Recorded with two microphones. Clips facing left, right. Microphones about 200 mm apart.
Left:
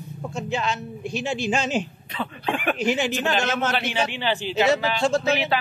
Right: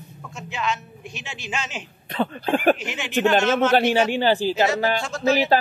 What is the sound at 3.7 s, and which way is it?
A man's voice, 45° right (ahead or behind).